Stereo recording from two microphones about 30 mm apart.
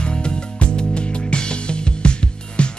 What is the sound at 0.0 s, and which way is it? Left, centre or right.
Music, left.